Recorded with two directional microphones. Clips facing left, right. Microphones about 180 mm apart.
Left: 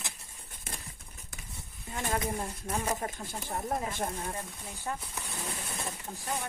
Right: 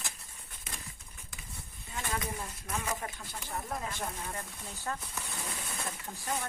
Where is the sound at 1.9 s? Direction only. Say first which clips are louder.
Left 4 dB; 45° left (ahead or behind).